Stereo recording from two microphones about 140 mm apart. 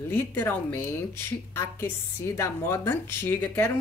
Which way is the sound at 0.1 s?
15° left (ahead or behind).